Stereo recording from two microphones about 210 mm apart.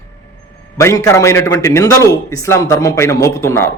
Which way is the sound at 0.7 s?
15° left (ahead or behind).